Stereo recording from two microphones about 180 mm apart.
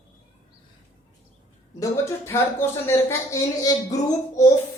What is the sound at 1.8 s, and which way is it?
Speech, 15° left (ahead or behind).